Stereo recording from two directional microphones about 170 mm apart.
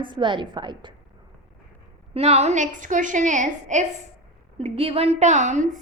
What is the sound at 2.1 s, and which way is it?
A woman's voice, 40° right (ahead or behind).